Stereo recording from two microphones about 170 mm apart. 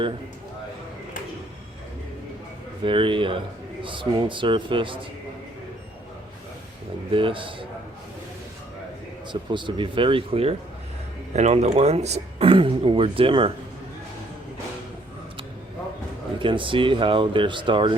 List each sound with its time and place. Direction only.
2.8 s speech: 30° right (ahead or behind)
7.1 s speech: 30° right (ahead or behind)
9.3 s speech: 30° right (ahead or behind)
16.4 s speech: 30° right (ahead or behind)